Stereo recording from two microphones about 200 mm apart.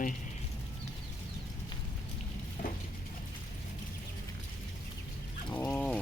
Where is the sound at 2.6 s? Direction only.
40° left (ahead or behind).